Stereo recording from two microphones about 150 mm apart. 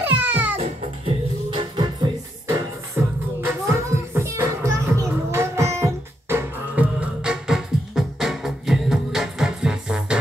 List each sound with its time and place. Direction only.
0.0 s music: 10° right (ahead or behind)
1.0 s music: 35° right (ahead or behind)
2.4 s music: 20° right (ahead or behind)